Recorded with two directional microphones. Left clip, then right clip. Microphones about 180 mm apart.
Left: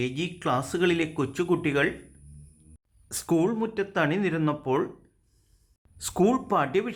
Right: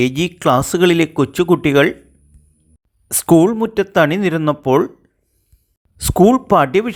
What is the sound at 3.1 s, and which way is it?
A man's voice, 40° right (ahead or behind).